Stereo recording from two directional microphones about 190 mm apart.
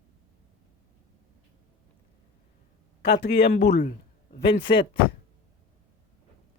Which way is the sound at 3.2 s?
60° left (ahead or behind).